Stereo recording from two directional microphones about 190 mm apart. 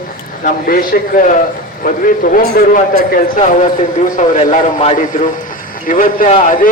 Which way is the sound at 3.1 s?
40° left (ahead or behind).